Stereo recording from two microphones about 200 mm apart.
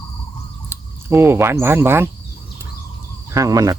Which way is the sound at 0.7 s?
10° right (ahead or behind).